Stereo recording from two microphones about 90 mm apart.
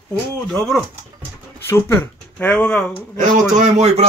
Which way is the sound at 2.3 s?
10° left (ahead or behind).